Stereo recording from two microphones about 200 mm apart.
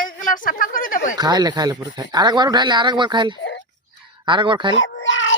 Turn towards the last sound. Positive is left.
turn(degrees=70)  # may be behind; listen again after turning